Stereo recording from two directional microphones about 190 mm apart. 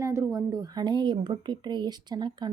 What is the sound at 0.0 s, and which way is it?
A woman's voice, 15° right (ahead or behind).